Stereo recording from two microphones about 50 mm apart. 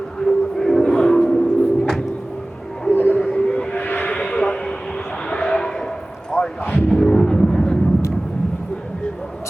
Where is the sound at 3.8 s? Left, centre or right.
Left.